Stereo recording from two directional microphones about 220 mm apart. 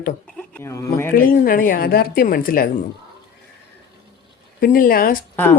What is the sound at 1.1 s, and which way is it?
A woman's voice, 40° left (ahead or behind).